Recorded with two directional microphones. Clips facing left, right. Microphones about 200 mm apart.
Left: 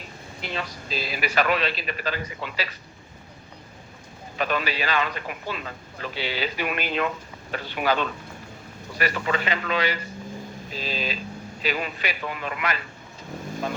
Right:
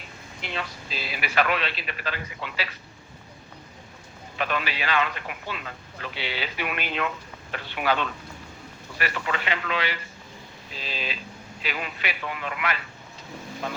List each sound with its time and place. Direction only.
0.4 s a man's voice: 40° left (ahead or behind)
4.4 s a man's voice: 40° left (ahead or behind)